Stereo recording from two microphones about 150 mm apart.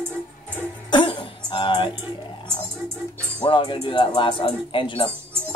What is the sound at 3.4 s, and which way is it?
Speech, 35° left (ahead or behind).